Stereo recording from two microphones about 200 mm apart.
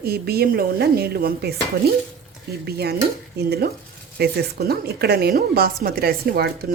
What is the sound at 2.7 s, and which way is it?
A woman's voice, 50° right (ahead or behind).